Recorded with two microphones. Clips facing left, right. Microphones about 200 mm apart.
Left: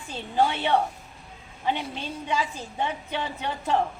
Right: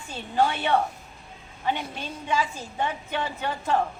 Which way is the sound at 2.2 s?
15° left (ahead or behind).